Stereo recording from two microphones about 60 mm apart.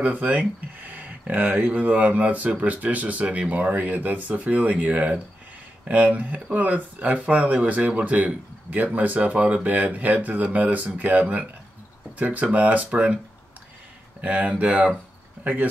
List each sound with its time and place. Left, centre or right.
0.0 s speech: right
14.2 s speech: right